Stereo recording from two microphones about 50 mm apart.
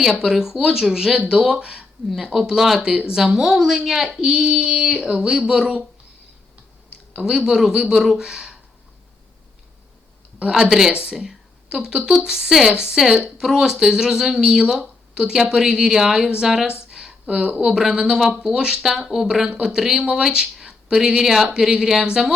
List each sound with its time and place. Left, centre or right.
0.2 s a woman's voice: centre
2.3 s a woman's voice: centre
7.3 s a woman's voice: centre
10.5 s a woman's voice: centre
16.9 s a sound: centre
17.5 s a woman's voice: centre